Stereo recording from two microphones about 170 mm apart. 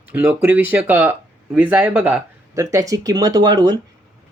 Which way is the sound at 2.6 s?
20° right (ahead or behind).